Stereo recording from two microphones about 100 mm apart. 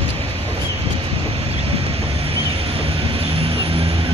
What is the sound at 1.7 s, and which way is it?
Vehicle, 75° right (ahead or behind).